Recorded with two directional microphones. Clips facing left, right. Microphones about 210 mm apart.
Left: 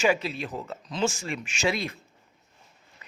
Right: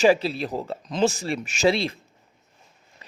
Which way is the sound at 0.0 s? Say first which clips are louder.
Right 6 dB; 35° right (ahead or behind).